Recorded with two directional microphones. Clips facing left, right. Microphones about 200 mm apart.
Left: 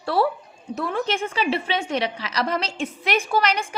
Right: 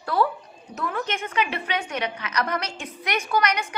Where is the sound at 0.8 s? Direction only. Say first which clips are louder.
Left 4 dB; 30° left (ahead or behind).